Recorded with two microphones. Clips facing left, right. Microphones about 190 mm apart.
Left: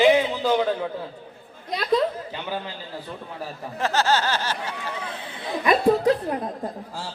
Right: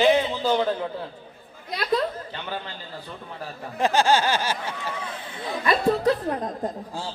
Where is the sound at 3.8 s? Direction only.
15° right (ahead or behind).